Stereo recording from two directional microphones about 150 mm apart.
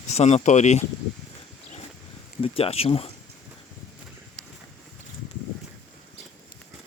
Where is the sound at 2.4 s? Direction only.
40° left (ahead or behind).